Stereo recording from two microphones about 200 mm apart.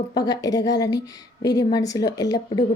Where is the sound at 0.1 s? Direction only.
20° left (ahead or behind).